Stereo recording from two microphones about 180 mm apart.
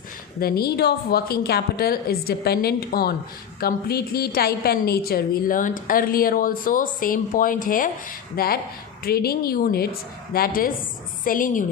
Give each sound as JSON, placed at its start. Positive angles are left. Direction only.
{"t": 0.3, "sound": "a woman's voice", "side_deg": 60}